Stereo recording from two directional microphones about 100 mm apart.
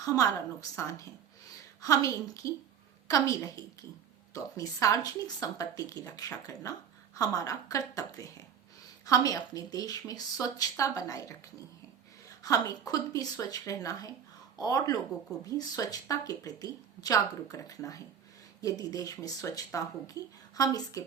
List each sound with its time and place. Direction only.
0.8 s speech: 30° left (ahead or behind)
12.4 s speech: 35° left (ahead or behind)